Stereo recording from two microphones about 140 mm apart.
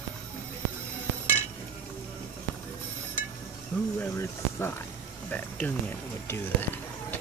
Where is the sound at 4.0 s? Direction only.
20° left (ahead or behind).